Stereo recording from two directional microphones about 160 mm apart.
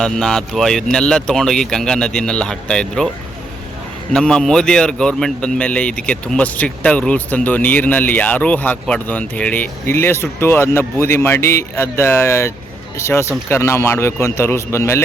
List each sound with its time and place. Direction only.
0.0 s speech: centre (ahead or behind)
4.1 s a man's voice: 5° left (ahead or behind)